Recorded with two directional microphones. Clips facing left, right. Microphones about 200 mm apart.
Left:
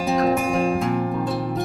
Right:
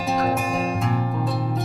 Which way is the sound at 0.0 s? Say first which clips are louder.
Left 3 dB; centre (ahead or behind).